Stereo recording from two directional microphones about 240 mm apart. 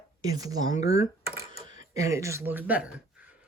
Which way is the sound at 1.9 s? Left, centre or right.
Centre.